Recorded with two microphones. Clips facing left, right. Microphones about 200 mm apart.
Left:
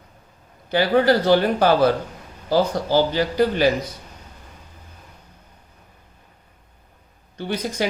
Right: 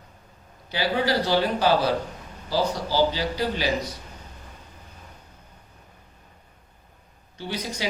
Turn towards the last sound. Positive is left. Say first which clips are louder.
# left 6 dB
turn(degrees=55)  # may be behind; listen again after turning